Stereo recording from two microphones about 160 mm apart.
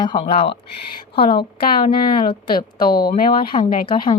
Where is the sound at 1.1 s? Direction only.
75° left (ahead or behind).